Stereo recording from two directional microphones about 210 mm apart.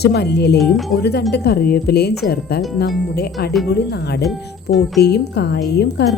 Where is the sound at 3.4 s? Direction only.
50° left (ahead or behind).